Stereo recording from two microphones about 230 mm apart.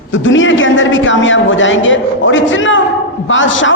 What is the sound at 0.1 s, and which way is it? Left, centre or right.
A man's voice, left.